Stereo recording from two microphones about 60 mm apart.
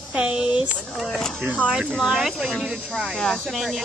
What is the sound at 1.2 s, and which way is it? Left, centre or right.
Speech, centre.